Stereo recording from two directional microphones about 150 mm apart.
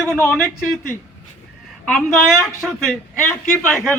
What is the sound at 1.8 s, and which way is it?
Speech, 5° left (ahead or behind).